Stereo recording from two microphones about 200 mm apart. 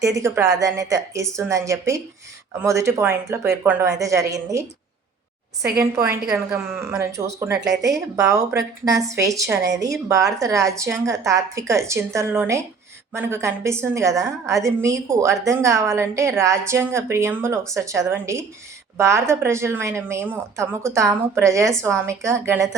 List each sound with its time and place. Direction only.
0.2 s a woman's voice: 15° right (ahead or behind)
5.8 s a woman's voice: 15° right (ahead or behind)